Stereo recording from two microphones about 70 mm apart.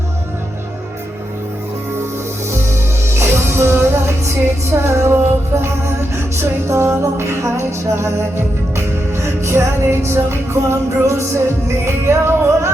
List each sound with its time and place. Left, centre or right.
3.1 s music: right